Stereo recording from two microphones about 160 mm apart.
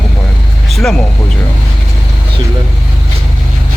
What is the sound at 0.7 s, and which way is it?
Speech, centre (ahead or behind).